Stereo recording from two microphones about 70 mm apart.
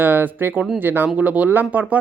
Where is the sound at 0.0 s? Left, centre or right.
Right.